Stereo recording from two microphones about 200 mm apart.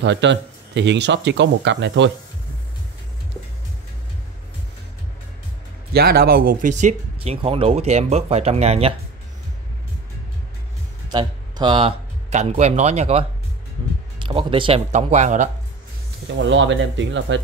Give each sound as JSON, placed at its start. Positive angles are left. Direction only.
{"t": 0.0, "sound": "speech", "side_deg": -65}
{"t": 5.9, "sound": "speech", "side_deg": -50}
{"t": 11.1, "sound": "speech", "side_deg": -20}
{"t": 14.2, "sound": "speech", "side_deg": -25}
{"t": 16.3, "sound": "speech", "side_deg": -65}